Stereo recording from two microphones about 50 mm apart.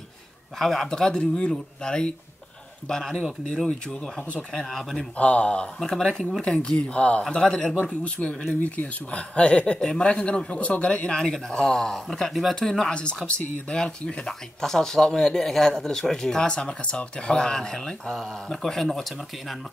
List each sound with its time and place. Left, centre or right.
0.6 s speech: centre
5.1 s speech: left
5.8 s speech: centre
13.4 s speech: left
14.2 s speech: centre